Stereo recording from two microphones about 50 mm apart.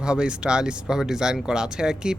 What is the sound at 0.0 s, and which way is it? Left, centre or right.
Speech, centre.